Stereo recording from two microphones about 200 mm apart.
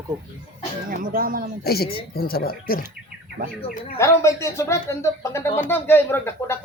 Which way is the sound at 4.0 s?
15° left (ahead or behind).